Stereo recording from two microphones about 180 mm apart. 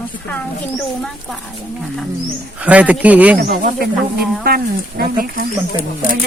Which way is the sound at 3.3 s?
55° right (ahead or behind).